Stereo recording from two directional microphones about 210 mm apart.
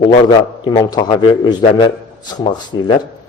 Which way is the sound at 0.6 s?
20° left (ahead or behind).